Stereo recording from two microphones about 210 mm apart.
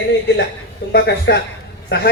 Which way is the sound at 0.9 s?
50° left (ahead or behind).